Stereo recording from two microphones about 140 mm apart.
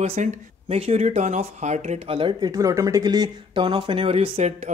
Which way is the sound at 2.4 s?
25° right (ahead or behind).